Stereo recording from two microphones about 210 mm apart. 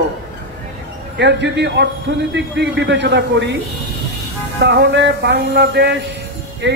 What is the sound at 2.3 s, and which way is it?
Speech, 55° right (ahead or behind).